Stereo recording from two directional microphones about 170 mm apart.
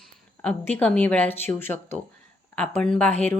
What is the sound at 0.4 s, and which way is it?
Speech, 10° left (ahead or behind).